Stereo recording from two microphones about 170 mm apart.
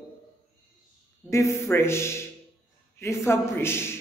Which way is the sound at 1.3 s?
20° left (ahead or behind).